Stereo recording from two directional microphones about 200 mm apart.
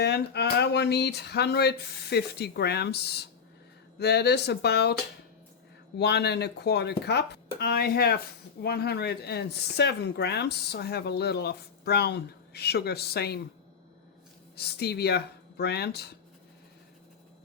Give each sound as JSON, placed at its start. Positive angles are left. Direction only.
{"t": 0.0, "sound": "speech", "side_deg": 55}
{"t": 6.0, "sound": "speech", "side_deg": 55}
{"t": 14.5, "sound": "speech", "side_deg": 50}